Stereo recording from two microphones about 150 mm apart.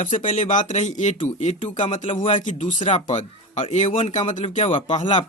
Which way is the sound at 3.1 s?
55° left (ahead or behind).